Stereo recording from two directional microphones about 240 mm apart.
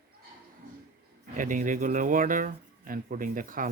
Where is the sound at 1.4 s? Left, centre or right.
Right.